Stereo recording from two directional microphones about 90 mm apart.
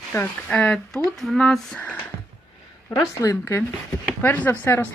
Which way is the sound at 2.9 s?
40° left (ahead or behind).